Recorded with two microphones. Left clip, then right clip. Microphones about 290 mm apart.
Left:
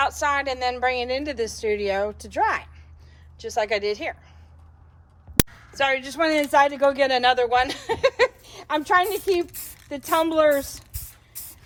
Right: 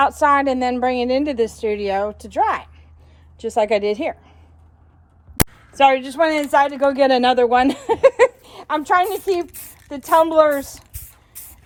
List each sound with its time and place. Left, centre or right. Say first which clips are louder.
0.0 s a man's voice: right 7 dB; centre
5.8 s a man's voice: right 7 dB; centre
9.5 s a sound: even; centre
10.1 s a man's voice: right 5 dB; centre